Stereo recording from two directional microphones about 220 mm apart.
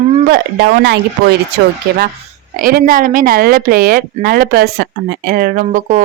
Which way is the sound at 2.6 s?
40° right (ahead or behind).